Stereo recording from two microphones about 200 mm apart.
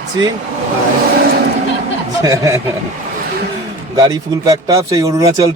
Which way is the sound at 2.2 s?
15° right (ahead or behind).